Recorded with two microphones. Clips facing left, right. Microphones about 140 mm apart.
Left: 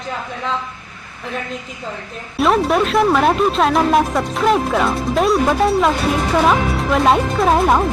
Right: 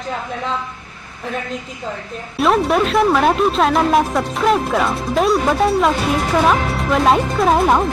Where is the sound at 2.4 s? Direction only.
Centre (ahead or behind).